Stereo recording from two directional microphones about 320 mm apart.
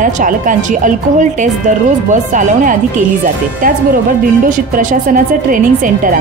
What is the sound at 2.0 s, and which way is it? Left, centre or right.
Speech, right.